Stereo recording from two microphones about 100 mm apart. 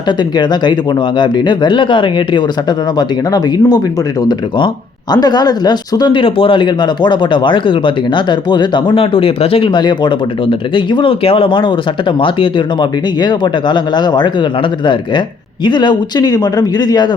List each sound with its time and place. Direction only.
0.2 s speech: 45° left (ahead or behind)
15.6 s speech: 50° left (ahead or behind)